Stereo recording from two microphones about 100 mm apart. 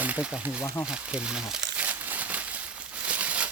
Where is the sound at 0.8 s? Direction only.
10° right (ahead or behind).